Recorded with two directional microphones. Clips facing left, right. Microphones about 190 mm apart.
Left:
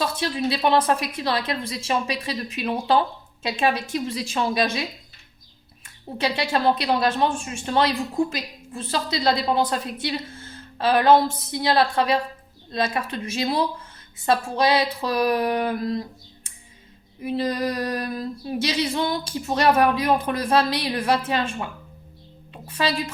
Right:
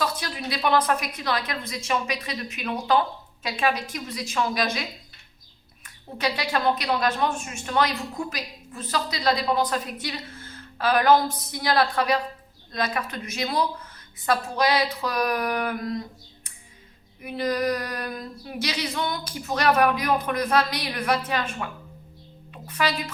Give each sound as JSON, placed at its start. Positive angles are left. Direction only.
{"t": 0.0, "sound": "speech", "side_deg": 25}
{"t": 6.1, "sound": "a woman's voice", "side_deg": 30}